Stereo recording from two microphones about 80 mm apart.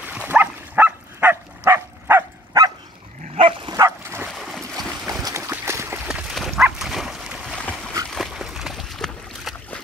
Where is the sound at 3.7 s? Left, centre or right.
Right.